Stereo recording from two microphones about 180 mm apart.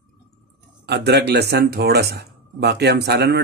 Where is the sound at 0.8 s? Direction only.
65° right (ahead or behind).